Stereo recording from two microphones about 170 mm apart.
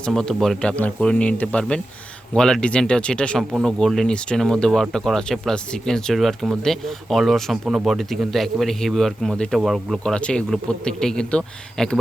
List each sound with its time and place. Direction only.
0.0 s speech: 5° left (ahead or behind)